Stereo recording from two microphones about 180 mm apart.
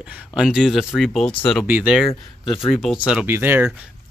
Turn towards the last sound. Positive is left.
turn(degrees=-10)  # may be behind; listen again after turning